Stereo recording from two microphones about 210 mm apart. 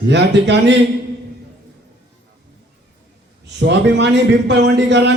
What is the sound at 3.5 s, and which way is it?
A man's voice, 55° right (ahead or behind).